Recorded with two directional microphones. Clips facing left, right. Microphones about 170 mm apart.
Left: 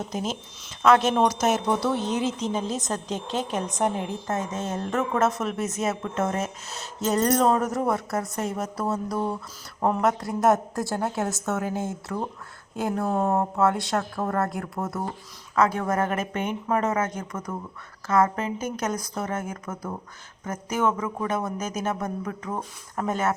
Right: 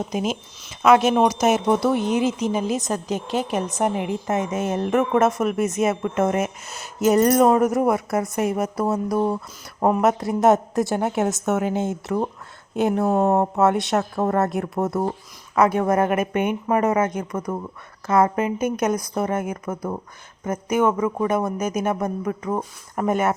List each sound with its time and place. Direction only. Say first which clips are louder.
0.1 s speech: right 5 dB; 15° right (ahead or behind)
5.5 s speech: right 6 dB; centre (ahead or behind)
7.0 s a woman's voice: right 6 dB; 15° right (ahead or behind)
15.8 s speech: right 6 dB; 15° right (ahead or behind)